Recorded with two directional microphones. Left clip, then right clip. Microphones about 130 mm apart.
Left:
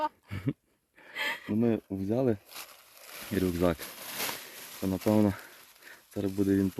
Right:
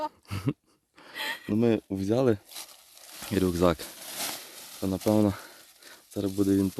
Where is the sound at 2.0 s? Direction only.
90° right.